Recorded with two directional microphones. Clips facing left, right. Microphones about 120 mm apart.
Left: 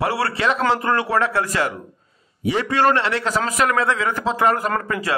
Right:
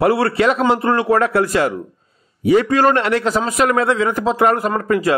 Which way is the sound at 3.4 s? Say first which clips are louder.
Right 4 dB; 30° right (ahead or behind).